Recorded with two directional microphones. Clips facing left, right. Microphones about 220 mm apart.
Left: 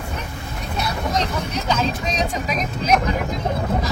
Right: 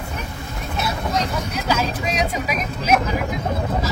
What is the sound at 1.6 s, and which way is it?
Speech, 10° right (ahead or behind).